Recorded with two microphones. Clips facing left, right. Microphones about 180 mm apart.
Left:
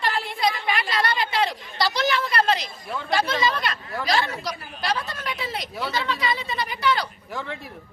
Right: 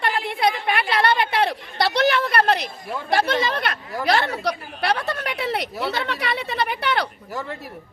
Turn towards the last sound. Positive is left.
turn(degrees=-60)  # may be behind; listen again after turning